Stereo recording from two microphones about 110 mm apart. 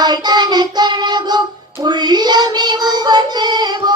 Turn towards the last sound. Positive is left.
turn(degrees=-40)  # may be behind; listen again after turning